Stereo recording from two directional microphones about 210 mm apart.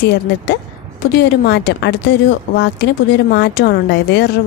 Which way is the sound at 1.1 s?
50° left (ahead or behind).